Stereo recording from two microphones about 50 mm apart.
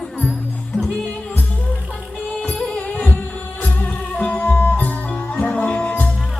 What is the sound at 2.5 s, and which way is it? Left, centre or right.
Music, left.